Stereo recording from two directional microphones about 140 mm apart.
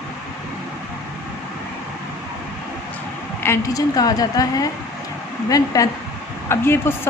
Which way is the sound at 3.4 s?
20° left (ahead or behind).